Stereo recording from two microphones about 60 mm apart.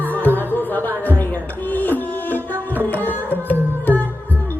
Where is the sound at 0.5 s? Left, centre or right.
Left.